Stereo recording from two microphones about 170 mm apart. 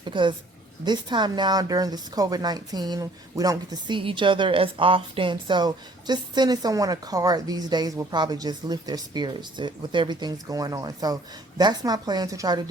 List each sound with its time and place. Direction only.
0.0 s speech: 30° right (ahead or behind)